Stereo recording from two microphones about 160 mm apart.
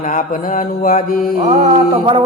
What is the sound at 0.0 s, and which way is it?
Mantra, 55° left (ahead or behind).